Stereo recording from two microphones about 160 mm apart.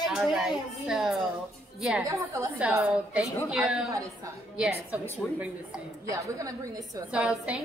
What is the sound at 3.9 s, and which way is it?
Speech, 20° right (ahead or behind).